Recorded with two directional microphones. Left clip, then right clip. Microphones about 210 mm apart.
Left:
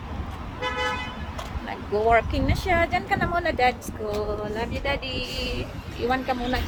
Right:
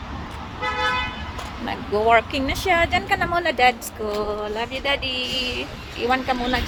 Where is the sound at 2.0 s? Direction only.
10° right (ahead or behind).